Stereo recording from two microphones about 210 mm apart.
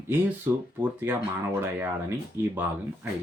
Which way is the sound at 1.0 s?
10° right (ahead or behind).